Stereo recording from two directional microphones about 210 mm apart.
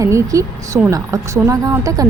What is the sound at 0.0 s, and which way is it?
A woman's voice, 15° right (ahead or behind).